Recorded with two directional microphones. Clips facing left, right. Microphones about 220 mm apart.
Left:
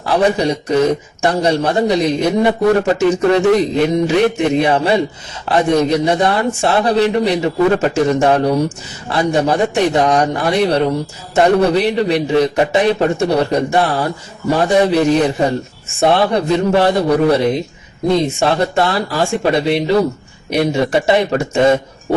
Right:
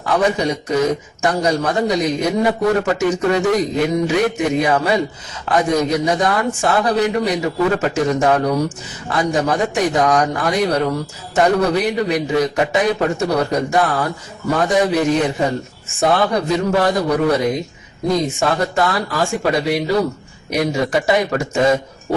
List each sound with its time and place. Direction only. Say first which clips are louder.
0.1 s a man's voice: left 3 dB; 30° left (ahead or behind)